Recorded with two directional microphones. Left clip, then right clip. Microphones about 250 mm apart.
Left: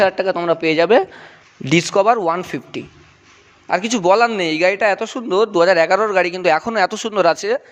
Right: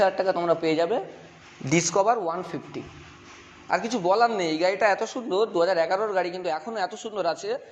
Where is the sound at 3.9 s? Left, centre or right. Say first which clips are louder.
Left 8 dB; left.